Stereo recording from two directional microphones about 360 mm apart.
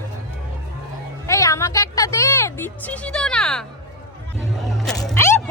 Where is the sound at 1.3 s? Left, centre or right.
Centre.